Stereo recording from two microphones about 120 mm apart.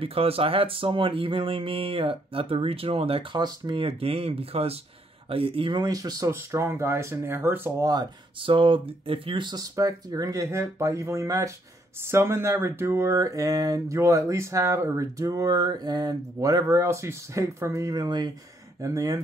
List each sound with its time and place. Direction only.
0.0 s speech: 50° right (ahead or behind)
5.8 s speech: 30° right (ahead or behind)
7.8 s speech: 35° right (ahead or behind)